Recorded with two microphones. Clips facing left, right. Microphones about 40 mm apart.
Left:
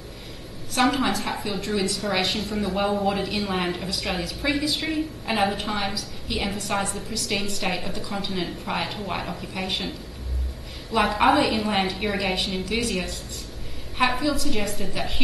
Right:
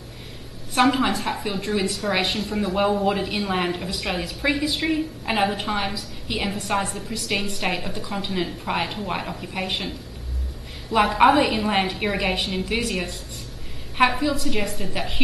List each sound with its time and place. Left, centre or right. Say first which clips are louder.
0.7 s a woman's voice: right 2 dB; centre
11.0 s a woman's voice: right 3 dB; centre